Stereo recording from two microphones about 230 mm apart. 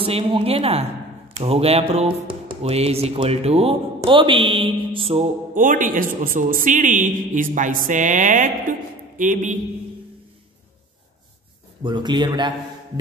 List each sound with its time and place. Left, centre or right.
0.0 s a man's voice: right
11.8 s a man's voice: centre